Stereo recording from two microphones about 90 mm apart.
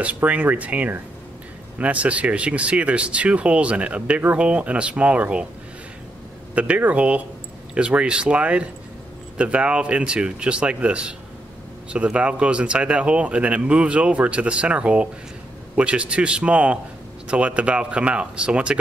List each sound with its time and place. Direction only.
0.0 s speech: 15° right (ahead or behind)
6.5 s speech: 15° right (ahead or behind)